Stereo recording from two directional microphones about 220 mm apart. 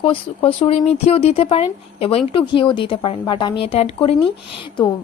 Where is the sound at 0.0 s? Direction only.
25° left (ahead or behind).